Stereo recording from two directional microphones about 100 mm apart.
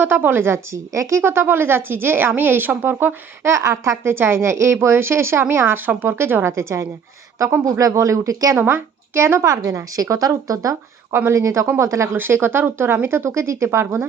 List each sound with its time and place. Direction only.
0.0 s a woman's voice: 20° right (ahead or behind)
8.5 s a woman's voice: 20° right (ahead or behind)